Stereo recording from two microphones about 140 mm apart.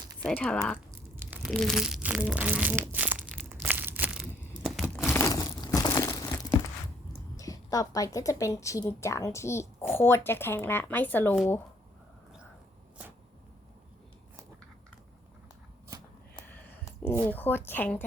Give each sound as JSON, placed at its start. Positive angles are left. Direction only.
{"t": 0.3, "sound": "a woman's voice", "side_deg": 5}
{"t": 0.9, "sound": "crunch", "side_deg": -15}
{"t": 1.5, "sound": "speech", "side_deg": 5}
{"t": 2.2, "sound": "crushing", "side_deg": -10}
{"t": 3.2, "sound": "crumpling", "side_deg": -10}
{"t": 5.1, "sound": "crumpling", "side_deg": 20}
{"t": 7.3, "sound": "a woman's voice", "side_deg": 25}
{"t": 16.5, "sound": "a sound", "side_deg": 10}
{"t": 17.2, "sound": "a woman's voice", "side_deg": 15}